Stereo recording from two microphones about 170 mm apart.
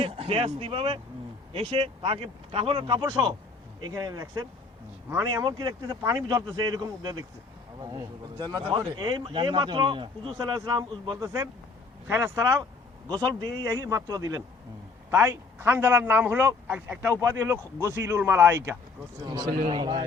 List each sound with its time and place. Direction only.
0.0 s a man's voice: 35° right (ahead or behind)